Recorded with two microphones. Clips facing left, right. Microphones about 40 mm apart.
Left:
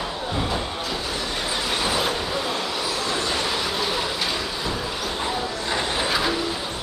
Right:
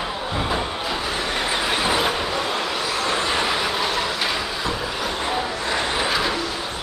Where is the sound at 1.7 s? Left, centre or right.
Centre.